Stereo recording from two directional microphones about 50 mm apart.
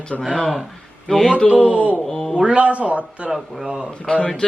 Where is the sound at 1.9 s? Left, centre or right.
Centre.